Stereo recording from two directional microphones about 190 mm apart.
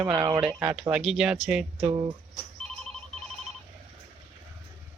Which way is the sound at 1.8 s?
20° right (ahead or behind).